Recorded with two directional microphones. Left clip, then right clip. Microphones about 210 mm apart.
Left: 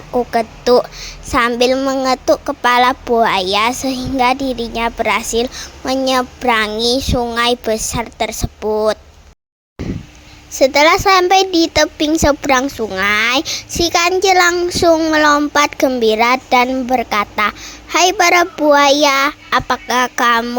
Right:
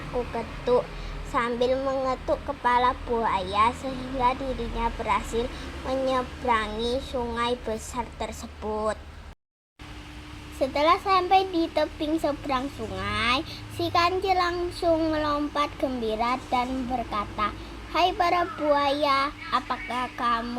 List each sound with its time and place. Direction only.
0.3 s a woman's voice: 50° left (ahead or behind)
10.6 s a woman's voice: 50° left (ahead or behind)